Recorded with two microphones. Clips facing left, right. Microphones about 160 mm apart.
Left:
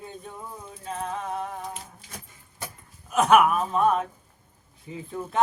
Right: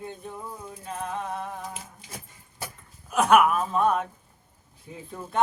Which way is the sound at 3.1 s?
Centre (ahead or behind).